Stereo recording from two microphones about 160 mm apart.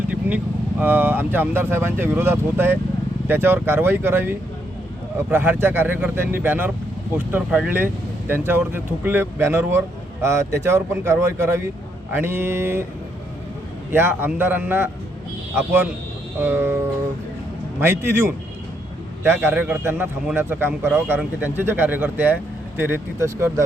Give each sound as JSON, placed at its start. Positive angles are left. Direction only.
{"t": 0.1, "sound": "speech", "side_deg": -10}
{"t": 13.9, "sound": "speech", "side_deg": -15}
{"t": 17.7, "sound": "speech", "side_deg": -15}